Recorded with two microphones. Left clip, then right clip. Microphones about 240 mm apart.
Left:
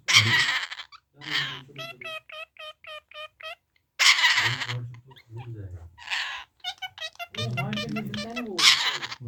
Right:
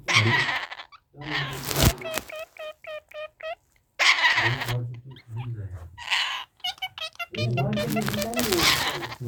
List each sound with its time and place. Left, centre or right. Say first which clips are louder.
0.0 s giggle: left 2 dB; centre
2.0 s a sound: right 5 dB; left
6.0 s music: right 5 dB; centre
7.3 s music: right 4 dB; centre